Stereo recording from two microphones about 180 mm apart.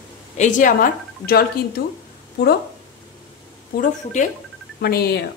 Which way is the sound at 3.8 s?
45° left (ahead or behind).